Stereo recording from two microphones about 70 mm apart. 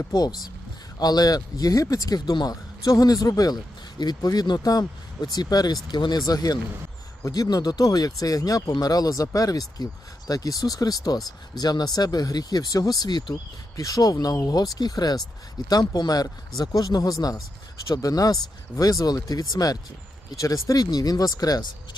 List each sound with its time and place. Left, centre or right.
0.1 s speech: left
5.9 s speech: left
13.7 s speech: left